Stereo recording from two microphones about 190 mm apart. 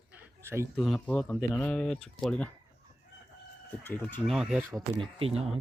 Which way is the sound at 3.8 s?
10° left (ahead or behind).